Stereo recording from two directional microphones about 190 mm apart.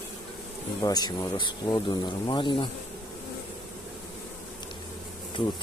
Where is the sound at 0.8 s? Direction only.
20° left (ahead or behind).